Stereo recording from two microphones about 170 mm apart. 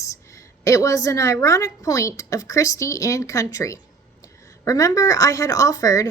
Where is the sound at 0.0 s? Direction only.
20° left (ahead or behind).